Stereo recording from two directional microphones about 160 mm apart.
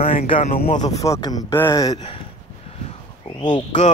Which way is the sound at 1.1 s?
25° left (ahead or behind).